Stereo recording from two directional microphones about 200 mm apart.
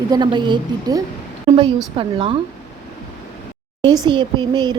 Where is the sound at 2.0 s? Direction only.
25° right (ahead or behind).